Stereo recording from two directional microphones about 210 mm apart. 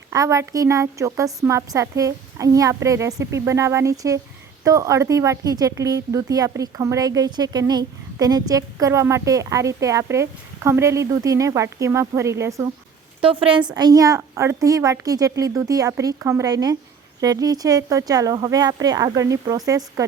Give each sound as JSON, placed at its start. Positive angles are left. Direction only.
{"t": 0.1, "sound": "a woman's voice", "side_deg": -15}
{"t": 13.2, "sound": "a woman's voice", "side_deg": -25}